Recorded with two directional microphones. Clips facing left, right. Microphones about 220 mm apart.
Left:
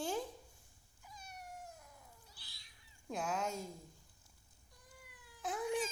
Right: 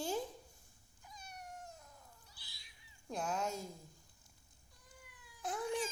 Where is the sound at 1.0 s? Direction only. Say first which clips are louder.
Even; 5° left (ahead or behind).